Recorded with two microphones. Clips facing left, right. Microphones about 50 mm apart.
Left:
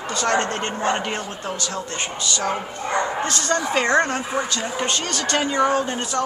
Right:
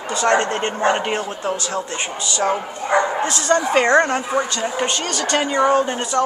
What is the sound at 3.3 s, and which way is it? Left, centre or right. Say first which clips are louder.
Speech: right 6 dB; right.